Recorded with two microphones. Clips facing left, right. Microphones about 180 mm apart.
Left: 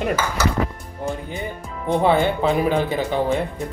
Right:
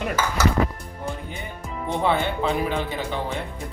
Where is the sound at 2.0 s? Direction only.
40° left (ahead or behind).